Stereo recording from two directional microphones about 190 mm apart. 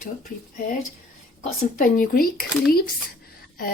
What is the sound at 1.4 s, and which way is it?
Speech, 45° left (ahead or behind).